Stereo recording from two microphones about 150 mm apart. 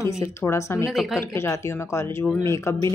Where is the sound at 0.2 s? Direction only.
20° left (ahead or behind).